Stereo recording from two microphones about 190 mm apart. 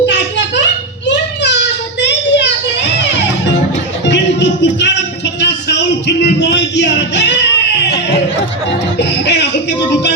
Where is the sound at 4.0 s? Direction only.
65° left (ahead or behind).